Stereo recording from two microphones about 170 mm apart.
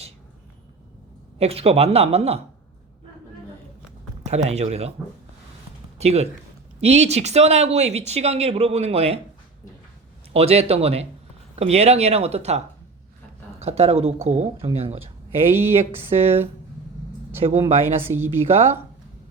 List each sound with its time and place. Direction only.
1.4 s speech: 35° right (ahead or behind)
4.3 s speech: 40° right (ahead or behind)
6.0 s speech: 40° right (ahead or behind)
10.3 s speech: 35° right (ahead or behind)
15.5 s speech: 15° right (ahead or behind)
17.6 s speech: 15° right (ahead or behind)